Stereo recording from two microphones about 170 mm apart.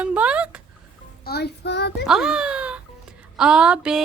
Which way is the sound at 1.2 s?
70° left (ahead or behind).